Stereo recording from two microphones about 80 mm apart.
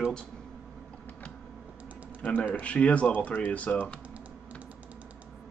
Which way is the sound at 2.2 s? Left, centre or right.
Left.